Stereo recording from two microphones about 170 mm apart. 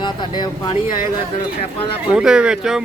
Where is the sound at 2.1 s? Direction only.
5° right (ahead or behind).